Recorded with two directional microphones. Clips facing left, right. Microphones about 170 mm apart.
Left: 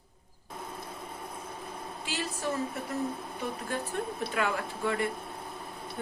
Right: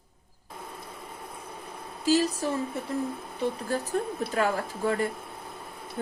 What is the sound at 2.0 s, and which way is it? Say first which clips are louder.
A woman's voice: right 11 dB; 40° right (ahead or behind).